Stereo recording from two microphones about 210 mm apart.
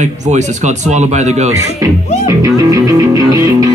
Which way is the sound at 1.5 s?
15° right (ahead or behind).